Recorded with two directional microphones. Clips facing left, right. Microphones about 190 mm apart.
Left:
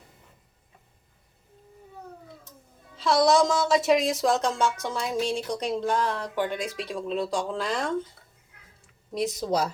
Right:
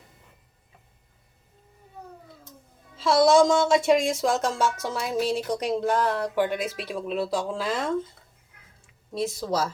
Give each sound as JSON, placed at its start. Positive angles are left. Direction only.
{"t": 3.0, "sound": "speech", "side_deg": 0}
{"t": 9.1, "sound": "speech", "side_deg": 20}